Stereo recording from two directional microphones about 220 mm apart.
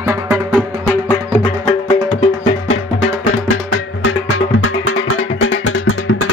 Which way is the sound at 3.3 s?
60° left (ahead or behind).